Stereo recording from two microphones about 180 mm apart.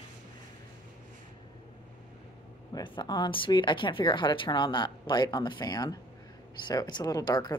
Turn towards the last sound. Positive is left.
turn(degrees=20)  # may be behind; listen again after turning